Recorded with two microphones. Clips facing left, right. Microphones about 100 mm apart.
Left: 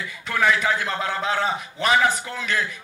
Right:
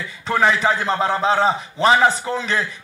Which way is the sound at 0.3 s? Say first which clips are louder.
Right 4 dB; 30° right (ahead or behind).